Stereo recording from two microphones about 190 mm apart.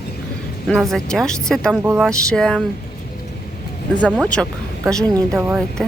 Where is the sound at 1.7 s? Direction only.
10° right (ahead or behind).